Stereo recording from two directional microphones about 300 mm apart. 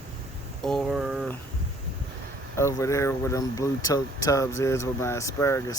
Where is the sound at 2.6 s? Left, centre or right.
Centre.